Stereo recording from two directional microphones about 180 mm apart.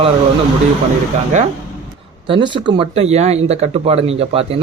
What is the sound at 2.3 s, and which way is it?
Speech, 25° right (ahead or behind).